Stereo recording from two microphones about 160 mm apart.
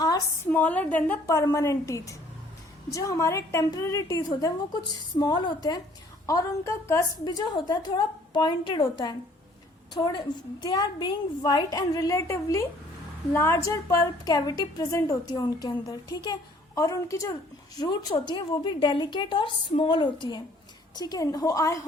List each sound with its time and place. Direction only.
0.5 s a woman's voice: 10° left (ahead or behind)